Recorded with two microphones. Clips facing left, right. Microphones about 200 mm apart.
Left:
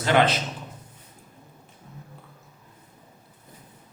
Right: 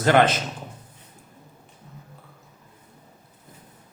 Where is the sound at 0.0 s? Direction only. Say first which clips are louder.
Right 3 dB; 45° right (ahead or behind).